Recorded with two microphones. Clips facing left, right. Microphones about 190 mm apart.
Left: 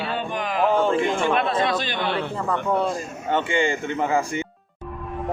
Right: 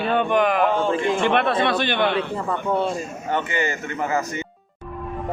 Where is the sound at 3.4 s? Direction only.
25° left (ahead or behind).